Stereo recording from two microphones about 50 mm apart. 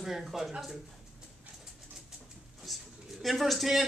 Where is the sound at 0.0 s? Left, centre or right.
Centre.